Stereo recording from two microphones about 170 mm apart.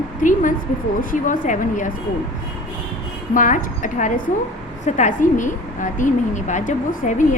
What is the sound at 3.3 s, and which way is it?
A woman's voice, 50° left (ahead or behind).